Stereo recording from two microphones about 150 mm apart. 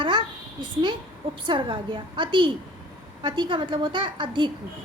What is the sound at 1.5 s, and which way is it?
A woman's voice, 30° right (ahead or behind).